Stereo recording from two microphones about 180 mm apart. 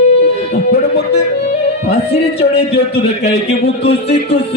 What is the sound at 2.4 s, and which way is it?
A man's voice, 65° left (ahead or behind).